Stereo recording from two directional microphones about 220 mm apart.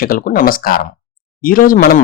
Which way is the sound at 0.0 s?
40° left (ahead or behind).